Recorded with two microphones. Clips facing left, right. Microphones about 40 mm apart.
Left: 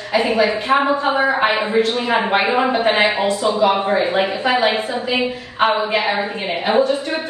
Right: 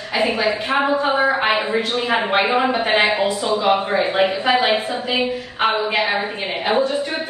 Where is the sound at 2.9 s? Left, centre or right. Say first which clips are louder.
Right 1 dB; right.